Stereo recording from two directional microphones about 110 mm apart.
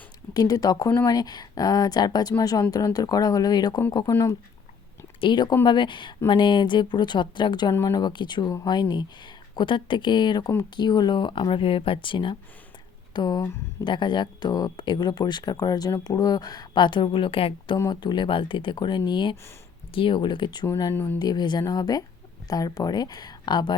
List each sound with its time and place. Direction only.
0.3 s speech: 35° left (ahead or behind)
5.2 s speech: 45° left (ahead or behind)
7.7 s speech: 25° left (ahead or behind)
7.9 s speech: 45° left (ahead or behind)
20.9 s speech: 20° left (ahead or behind)
21.2 s speech: 40° left (ahead or behind)